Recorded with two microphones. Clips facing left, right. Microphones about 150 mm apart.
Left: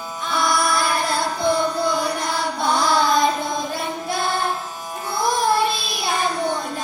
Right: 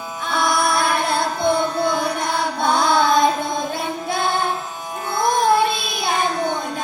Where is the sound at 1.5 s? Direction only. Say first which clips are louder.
Right 1 dB; 55° right (ahead or behind).